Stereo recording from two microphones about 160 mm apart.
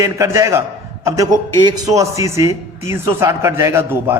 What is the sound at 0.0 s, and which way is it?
A man's voice, 20° right (ahead or behind).